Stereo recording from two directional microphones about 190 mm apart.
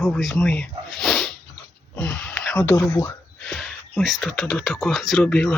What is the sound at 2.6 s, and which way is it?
Speech, 15° left (ahead or behind).